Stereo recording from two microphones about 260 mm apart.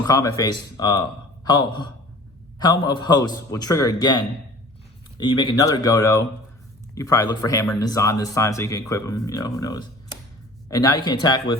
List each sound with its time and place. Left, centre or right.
0.0 s speech: centre